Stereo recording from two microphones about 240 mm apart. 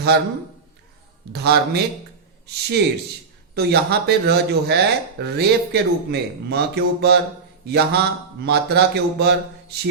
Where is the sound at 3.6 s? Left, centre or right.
Right.